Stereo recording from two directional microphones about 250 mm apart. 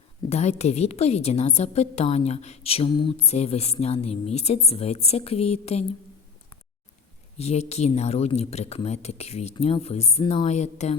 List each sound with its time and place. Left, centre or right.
0.3 s a woman's voice: left
7.3 s a woman's voice: left